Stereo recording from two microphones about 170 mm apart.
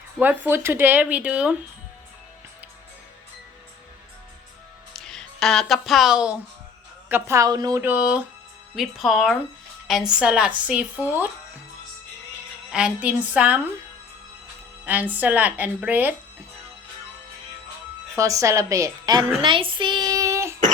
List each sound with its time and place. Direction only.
0.2 s speech: 10° right (ahead or behind)
4.9 s speech: 5° left (ahead or behind)
7.1 s speech: 15° right (ahead or behind)
12.7 s speech: 5° right (ahead or behind)
14.8 s speech: 10° right (ahead or behind)
18.2 s a woman's voice: 20° right (ahead or behind)